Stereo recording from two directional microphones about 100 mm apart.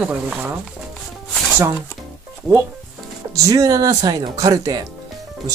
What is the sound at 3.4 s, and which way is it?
Speech, 35° right (ahead or behind).